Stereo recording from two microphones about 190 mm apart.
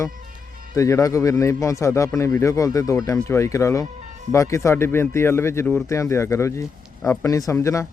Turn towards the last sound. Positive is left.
turn(degrees=15)  # may be behind; listen again after turning